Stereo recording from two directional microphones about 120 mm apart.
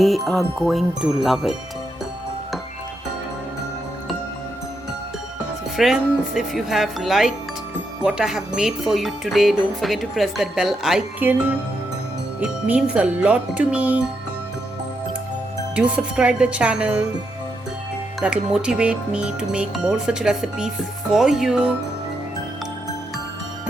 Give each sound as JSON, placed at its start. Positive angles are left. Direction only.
{"t": 0.3, "sound": "speech", "side_deg": 0}
{"t": 5.7, "sound": "speech", "side_deg": -5}
{"t": 11.2, "sound": "speech", "side_deg": -15}
{"t": 15.7, "sound": "speech", "side_deg": -10}
{"t": 18.2, "sound": "speech", "side_deg": -5}